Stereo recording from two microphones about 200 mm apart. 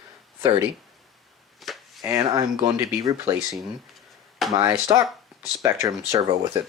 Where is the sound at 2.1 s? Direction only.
20° right (ahead or behind).